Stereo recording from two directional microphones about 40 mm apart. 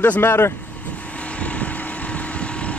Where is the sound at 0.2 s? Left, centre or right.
Left.